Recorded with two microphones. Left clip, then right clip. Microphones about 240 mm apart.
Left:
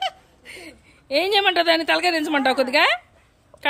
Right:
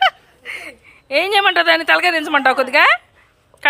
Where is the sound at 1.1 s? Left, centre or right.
Centre.